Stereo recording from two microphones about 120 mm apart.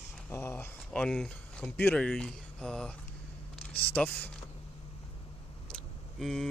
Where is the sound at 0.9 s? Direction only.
10° left (ahead or behind).